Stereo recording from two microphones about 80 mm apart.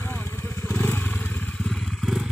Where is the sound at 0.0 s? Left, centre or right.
Left.